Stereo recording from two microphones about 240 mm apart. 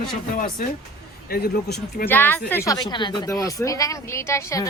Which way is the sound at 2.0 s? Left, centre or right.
Centre.